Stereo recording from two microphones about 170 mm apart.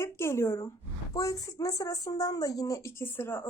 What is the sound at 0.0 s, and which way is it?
Speech, 15° left (ahead or behind).